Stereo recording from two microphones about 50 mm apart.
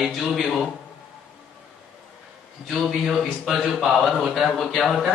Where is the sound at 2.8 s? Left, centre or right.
Centre.